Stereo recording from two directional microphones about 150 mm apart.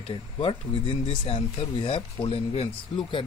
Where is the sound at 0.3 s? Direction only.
35° left (ahead or behind).